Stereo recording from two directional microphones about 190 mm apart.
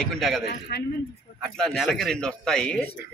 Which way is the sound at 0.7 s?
55° left (ahead or behind).